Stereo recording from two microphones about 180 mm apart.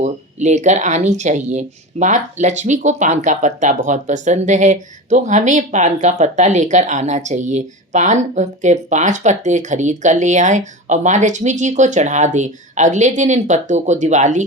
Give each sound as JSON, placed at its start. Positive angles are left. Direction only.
{"t": 0.0, "sound": "speech", "side_deg": -40}